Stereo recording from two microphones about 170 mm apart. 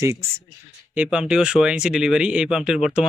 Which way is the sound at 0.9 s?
5° right (ahead or behind).